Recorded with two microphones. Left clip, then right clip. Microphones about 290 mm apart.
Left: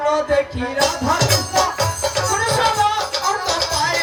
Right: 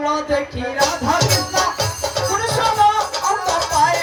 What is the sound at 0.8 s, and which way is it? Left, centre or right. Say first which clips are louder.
Music: right 1 dB; right.